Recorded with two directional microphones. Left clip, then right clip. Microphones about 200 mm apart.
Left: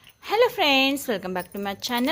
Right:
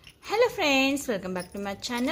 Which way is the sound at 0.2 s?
30° left (ahead or behind).